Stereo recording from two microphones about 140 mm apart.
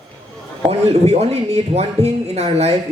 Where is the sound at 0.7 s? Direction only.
50° right (ahead or behind).